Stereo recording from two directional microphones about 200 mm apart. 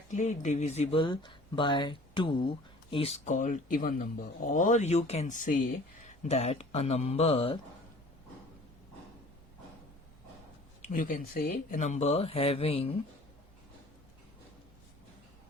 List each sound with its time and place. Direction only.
0.1 s speech: 35° left (ahead or behind)
10.9 s speech: 45° left (ahead or behind)